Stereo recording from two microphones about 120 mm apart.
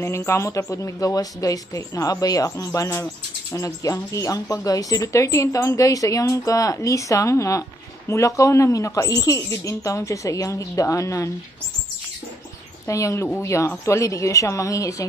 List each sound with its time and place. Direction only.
0.0 s speech: 20° left (ahead or behind)
12.8 s speech: 25° left (ahead or behind)